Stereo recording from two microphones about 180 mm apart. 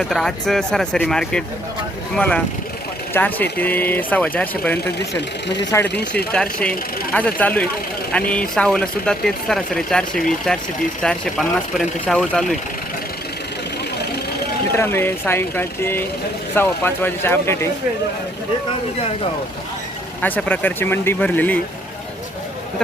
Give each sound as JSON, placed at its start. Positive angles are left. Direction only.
{"t": 0.0, "sound": "speech", "side_deg": 0}
{"t": 5.9, "sound": "speech", "side_deg": 70}
{"t": 6.3, "sound": "speech", "side_deg": 5}
{"t": 14.8, "sound": "speech", "side_deg": 15}
{"t": 20.2, "sound": "speech", "side_deg": 10}